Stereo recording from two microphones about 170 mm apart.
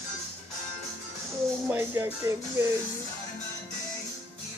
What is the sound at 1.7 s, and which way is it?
Speech, 15° right (ahead or behind).